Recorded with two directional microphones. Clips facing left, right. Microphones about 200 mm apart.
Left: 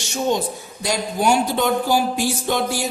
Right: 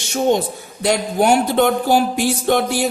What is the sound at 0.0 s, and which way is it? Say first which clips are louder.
A man's voice: right 4 dB; 55° right (ahead or behind).